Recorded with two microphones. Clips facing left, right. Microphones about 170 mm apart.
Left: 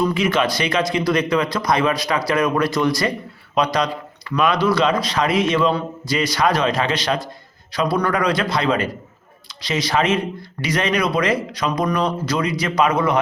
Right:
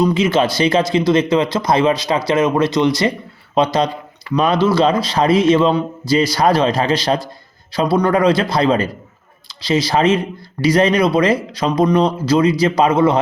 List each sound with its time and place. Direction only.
0.0 s a man's voice: 25° right (ahead or behind)